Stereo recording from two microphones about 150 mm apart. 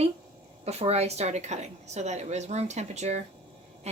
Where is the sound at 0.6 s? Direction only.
45° right (ahead or behind).